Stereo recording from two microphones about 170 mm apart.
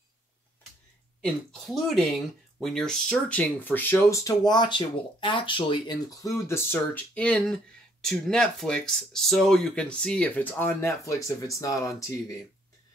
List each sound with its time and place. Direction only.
1.2 s speech: centre (ahead or behind); by 12.2 s 20° left (ahead or behind)